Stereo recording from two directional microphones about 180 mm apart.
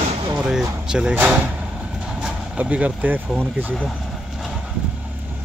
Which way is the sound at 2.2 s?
5° right (ahead or behind).